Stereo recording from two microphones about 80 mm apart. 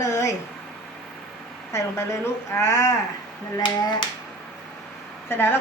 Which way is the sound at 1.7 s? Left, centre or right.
Left.